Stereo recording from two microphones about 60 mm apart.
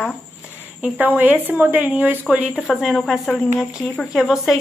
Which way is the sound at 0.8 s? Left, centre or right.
Right.